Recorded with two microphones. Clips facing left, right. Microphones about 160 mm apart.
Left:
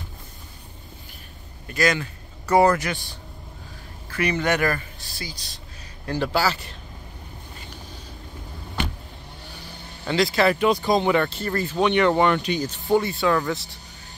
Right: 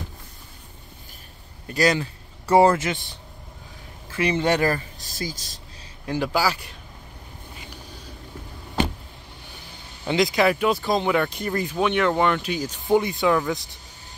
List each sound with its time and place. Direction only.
1.7 s speech: 35° right (ahead or behind)
4.1 s speech: 25° right (ahead or behind)
5.0 s speech: 45° right (ahead or behind)
6.0 s speech: 10° right (ahead or behind)
10.0 s speech: 15° right (ahead or behind); by 11.2 s centre (ahead or behind)
11.2 s speech: 15° right (ahead or behind)
11.8 s speech: centre (ahead or behind)